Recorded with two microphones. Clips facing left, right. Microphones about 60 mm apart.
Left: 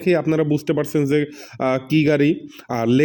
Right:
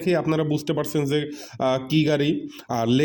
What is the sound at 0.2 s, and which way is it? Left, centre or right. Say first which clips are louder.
A man's voice: left 4 dB; left.